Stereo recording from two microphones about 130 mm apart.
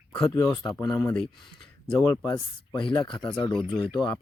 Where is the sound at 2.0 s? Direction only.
25° left (ahead or behind).